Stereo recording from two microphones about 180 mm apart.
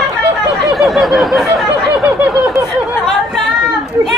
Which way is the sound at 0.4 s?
Centre (ahead or behind).